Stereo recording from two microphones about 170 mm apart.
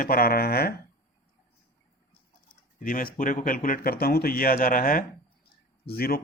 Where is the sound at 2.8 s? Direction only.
55° left (ahead or behind).